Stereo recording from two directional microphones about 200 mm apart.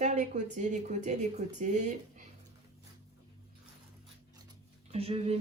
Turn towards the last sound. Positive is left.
turn(degrees=-30)  # may be behind; listen again after turning